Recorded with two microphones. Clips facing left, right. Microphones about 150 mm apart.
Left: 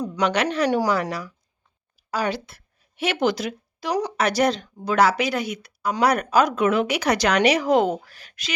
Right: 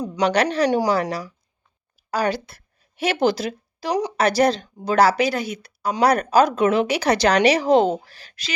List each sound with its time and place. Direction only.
0.2 s speech: 35° right (ahead or behind)
2.0 s speech: 40° right (ahead or behind)